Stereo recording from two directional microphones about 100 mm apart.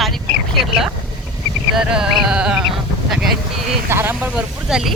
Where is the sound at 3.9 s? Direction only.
25° right (ahead or behind).